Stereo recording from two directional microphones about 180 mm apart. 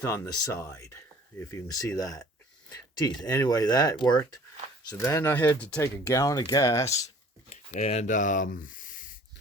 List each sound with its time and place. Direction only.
0.0 s speech: 15° left (ahead or behind)
7.5 s speech: 35° left (ahead or behind)